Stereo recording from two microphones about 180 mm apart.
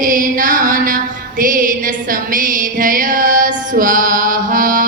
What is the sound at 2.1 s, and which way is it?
Female singing, 50° right (ahead or behind).